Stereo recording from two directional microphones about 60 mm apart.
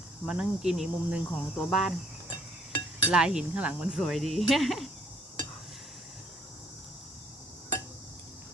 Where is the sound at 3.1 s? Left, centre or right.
Centre.